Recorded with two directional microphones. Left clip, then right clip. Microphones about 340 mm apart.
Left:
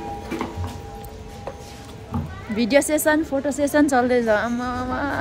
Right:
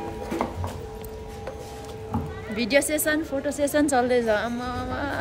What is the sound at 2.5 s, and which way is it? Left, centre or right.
A woman's voice, centre.